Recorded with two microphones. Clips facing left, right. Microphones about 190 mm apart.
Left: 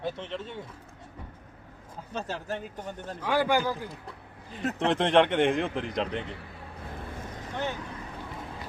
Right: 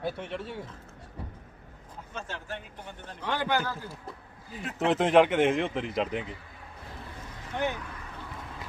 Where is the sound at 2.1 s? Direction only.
40° left (ahead or behind).